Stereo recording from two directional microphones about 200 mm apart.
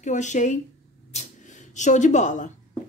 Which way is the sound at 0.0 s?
35° left (ahead or behind).